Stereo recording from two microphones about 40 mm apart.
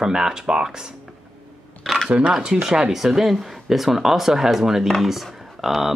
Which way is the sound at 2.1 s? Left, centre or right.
Right.